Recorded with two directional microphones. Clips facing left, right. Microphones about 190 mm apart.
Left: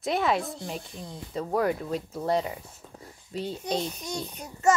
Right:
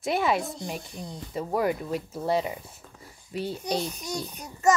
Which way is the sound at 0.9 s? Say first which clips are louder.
Even; 15° right (ahead or behind).